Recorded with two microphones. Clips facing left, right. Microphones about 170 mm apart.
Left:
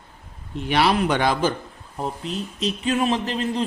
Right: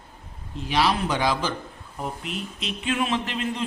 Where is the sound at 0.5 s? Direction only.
60° left (ahead or behind).